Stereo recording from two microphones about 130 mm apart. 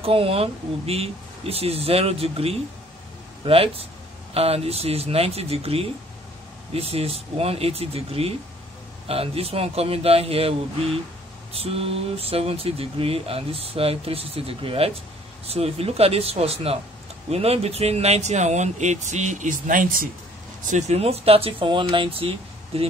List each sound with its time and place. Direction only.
0.0 s speech: 45° right (ahead or behind)
11.5 s speech: 50° right (ahead or behind); by 20.1 s 90° right
20.6 s speech: 60° right (ahead or behind)